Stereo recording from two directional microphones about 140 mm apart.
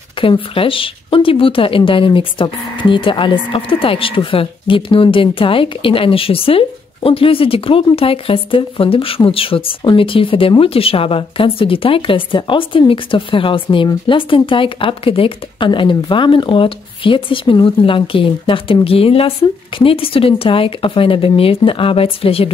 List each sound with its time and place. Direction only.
0.2 s speech: 40° left (ahead or behind)